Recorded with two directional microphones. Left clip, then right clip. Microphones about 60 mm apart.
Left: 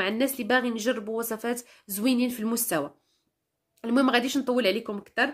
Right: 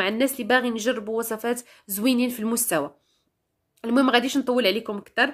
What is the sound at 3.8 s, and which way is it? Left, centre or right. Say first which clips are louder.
Speech: right 3 dB; right.